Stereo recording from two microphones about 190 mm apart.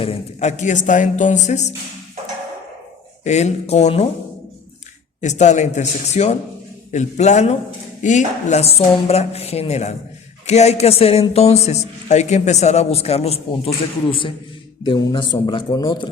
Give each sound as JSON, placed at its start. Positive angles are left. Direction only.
{"t": 0.0, "sound": "speech", "side_deg": 35}
{"t": 3.2, "sound": "speech", "side_deg": 35}
{"t": 5.2, "sound": "speech", "side_deg": 35}